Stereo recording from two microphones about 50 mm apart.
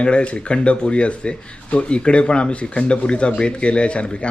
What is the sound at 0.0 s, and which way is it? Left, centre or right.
Speech, left.